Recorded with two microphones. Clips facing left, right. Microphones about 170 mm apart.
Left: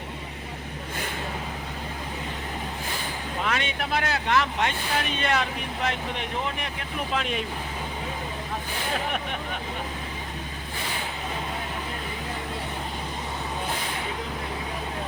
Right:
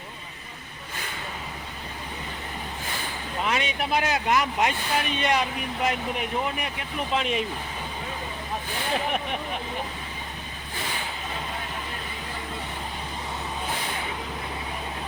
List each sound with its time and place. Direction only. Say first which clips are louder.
3.4 s speech: right 2 dB; 10° right (ahead or behind)